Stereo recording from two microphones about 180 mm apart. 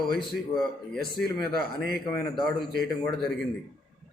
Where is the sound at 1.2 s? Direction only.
55° right (ahead or behind).